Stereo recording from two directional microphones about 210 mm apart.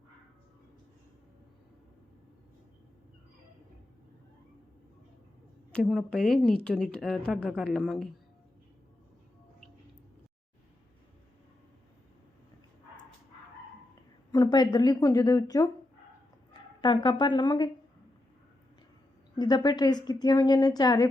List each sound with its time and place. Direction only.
5.7 s a woman's voice: centre (ahead or behind)
14.3 s a woman's voice: 20° left (ahead or behind)
16.8 s a woman's voice: 20° left (ahead or behind)
19.4 s a woman's voice: 20° left (ahead or behind)